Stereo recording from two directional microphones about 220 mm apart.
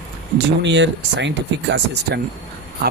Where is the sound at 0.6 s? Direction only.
55° right (ahead or behind).